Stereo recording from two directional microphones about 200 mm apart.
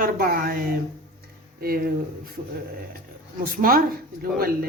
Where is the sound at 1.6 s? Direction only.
50° right (ahead or behind).